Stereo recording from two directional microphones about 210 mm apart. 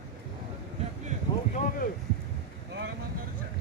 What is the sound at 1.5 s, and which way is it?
Boat, 40° left (ahead or behind).